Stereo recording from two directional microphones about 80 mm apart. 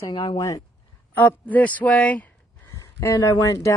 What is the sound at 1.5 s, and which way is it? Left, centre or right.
Speech, centre.